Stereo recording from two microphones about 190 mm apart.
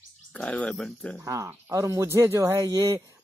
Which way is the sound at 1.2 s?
15° right (ahead or behind).